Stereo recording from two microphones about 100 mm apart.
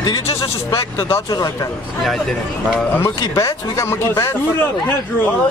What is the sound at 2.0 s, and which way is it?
Speech, centre (ahead or behind).